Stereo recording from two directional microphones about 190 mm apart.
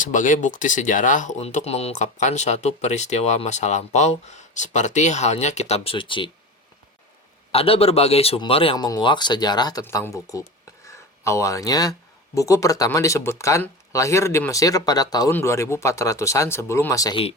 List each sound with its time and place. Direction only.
0.0 s speech: 45° left (ahead or behind); by 6.3 s 25° left (ahead or behind)
7.5 s a man's voice: 30° left (ahead or behind)